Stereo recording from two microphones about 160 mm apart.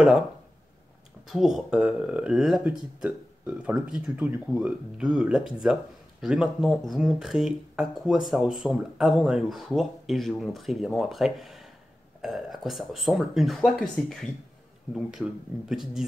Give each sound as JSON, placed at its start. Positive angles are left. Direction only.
{"t": 1.2, "sound": "speech", "side_deg": 0}